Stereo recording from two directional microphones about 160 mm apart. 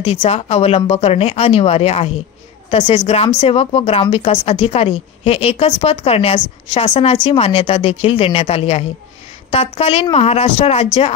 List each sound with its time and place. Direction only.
0.0 s speech: 40° left (ahead or behind)